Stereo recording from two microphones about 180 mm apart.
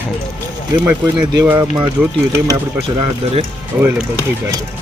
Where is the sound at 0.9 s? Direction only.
20° right (ahead or behind).